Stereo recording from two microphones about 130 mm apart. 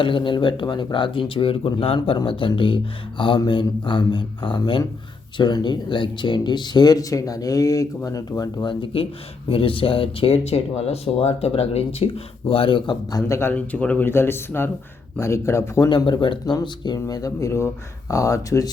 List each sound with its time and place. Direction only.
0.0 s speech: 40° left (ahead or behind)
8.8 s speech: 45° left (ahead or behind); by 13.5 s 25° left (ahead or behind)
13.5 s speech: 10° left (ahead or behind)
15.9 s speech: 35° left (ahead or behind)